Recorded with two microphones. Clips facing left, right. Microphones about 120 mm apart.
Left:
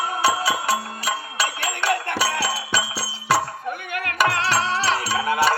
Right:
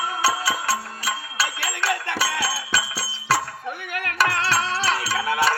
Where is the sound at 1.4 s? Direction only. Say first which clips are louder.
Left 2 dB; 5° right (ahead or behind).